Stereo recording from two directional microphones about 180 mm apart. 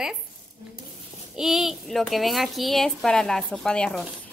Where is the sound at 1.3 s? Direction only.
Centre (ahead or behind).